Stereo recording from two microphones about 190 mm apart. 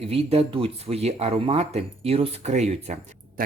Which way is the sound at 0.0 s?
30° right (ahead or behind).